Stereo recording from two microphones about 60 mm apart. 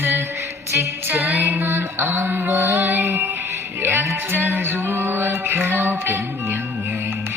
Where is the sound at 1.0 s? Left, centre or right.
Right.